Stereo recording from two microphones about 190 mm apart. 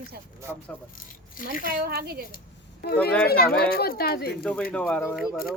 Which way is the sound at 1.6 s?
55° right (ahead or behind).